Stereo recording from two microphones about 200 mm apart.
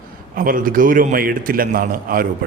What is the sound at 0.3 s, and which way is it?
A man's voice, 45° right (ahead or behind).